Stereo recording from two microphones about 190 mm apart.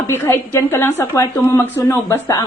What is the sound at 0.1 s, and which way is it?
A woman's voice, 15° left (ahead or behind).